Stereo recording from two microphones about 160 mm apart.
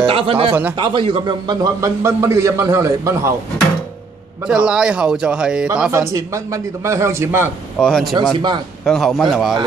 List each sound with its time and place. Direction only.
0.0 s a man's voice: 35° right (ahead or behind); by 3.3 s 20° right (ahead or behind)
4.5 s a man's voice: 5° right (ahead or behind)
5.9 s a man's voice: 15° right (ahead or behind)
7.8 s a man's voice: 5° left (ahead or behind)
8.4 s a man's voice: 30° right (ahead or behind)
8.8 s a man's voice: centre (ahead or behind)